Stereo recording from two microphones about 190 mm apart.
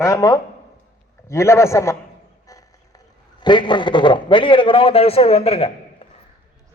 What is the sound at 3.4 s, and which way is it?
A man's voice, 25° left (ahead or behind).